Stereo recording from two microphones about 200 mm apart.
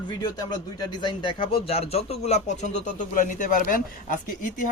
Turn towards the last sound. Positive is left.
turn(degrees=40)  # may be behind; listen again after turning